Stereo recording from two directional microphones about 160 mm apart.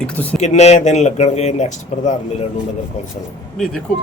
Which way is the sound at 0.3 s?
45° left (ahead or behind).